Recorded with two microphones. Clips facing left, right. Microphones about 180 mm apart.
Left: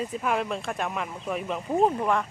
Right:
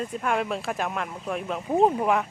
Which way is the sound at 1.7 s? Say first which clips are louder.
Right 2 dB; 10° right (ahead or behind).